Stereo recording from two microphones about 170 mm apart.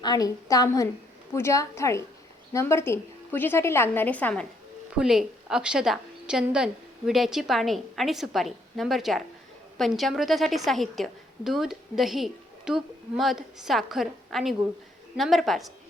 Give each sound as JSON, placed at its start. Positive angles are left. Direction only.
{"t": 0.0, "sound": "a woman's voice", "side_deg": 25}
{"t": 4.9, "sound": "a woman's voice", "side_deg": -5}